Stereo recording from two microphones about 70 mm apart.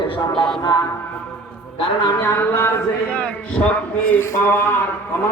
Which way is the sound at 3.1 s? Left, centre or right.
Left.